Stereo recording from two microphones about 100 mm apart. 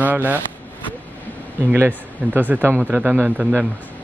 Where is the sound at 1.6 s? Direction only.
20° right (ahead or behind).